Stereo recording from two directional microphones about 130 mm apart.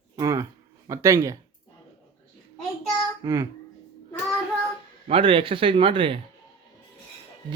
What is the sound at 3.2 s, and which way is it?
Speech, 25° right (ahead or behind).